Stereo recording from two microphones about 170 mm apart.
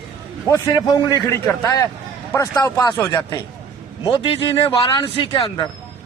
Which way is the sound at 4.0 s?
30° left (ahead or behind).